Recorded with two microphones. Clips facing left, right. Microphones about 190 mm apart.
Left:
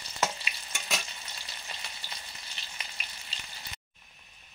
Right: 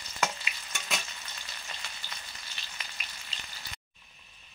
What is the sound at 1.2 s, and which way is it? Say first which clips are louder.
Frying: even; 25° left (ahead or behind).